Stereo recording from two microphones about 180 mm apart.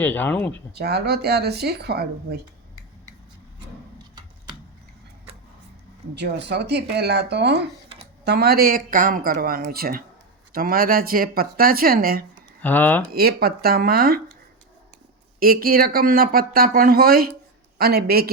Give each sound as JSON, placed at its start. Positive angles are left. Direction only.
{"t": 0.0, "sound": "speech", "side_deg": 10}
{"t": 0.7, "sound": "speech", "side_deg": -65}
{"t": 3.9, "sound": "typing", "side_deg": -25}
{"t": 6.1, "sound": "speech", "side_deg": -65}
{"t": 12.6, "sound": "speech", "side_deg": 10}
{"t": 13.1, "sound": "speech", "side_deg": -60}
{"t": 15.4, "sound": "speech", "side_deg": -55}